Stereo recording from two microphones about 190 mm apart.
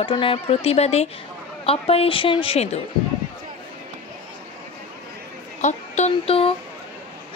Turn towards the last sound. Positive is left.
turn(degrees=30)  # may be behind; listen again after turning